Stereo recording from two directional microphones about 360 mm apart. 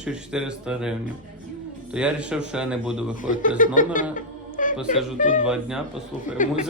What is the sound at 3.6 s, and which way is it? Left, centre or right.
Music, left.